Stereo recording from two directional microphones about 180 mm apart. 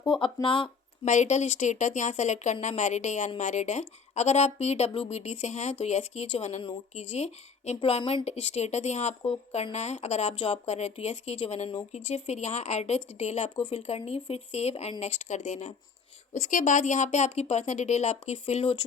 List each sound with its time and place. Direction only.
0.0 s speech: 25° left (ahead or behind)
1.0 s speech: 40° left (ahead or behind)